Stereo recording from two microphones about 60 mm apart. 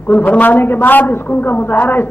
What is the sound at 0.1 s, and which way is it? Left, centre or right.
A woman's voice, left.